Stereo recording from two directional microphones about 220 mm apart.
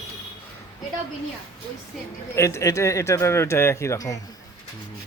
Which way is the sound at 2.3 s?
15° left (ahead or behind).